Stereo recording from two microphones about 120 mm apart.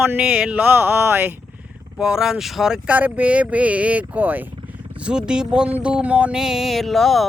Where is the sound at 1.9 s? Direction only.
5° right (ahead or behind).